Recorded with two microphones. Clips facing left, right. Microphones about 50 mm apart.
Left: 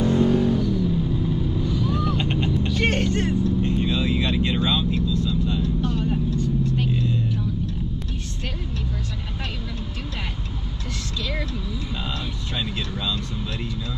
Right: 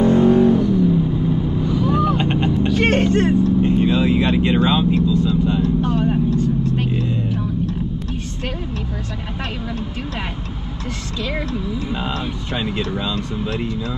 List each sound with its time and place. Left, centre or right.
0.0 s vehicle: right
11.2 s a sound: right
12.5 s speech: right